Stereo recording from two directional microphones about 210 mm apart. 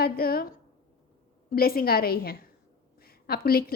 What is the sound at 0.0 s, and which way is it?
Speech, 45° left (ahead or behind).